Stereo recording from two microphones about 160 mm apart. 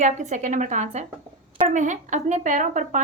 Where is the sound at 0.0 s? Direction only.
50° right (ahead or behind).